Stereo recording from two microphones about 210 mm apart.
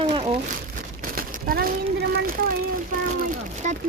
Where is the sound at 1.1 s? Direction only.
45° right (ahead or behind).